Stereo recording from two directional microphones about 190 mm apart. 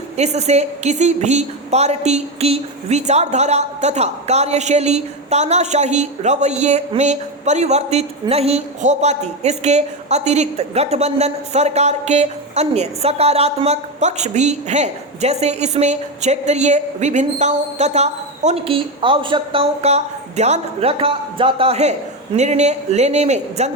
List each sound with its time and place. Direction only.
0.2 s a woman's voice: 35° right (ahead or behind)